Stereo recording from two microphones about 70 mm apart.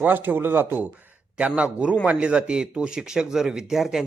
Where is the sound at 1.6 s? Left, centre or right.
Centre.